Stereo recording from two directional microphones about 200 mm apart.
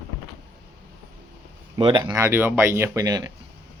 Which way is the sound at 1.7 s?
25° right (ahead or behind).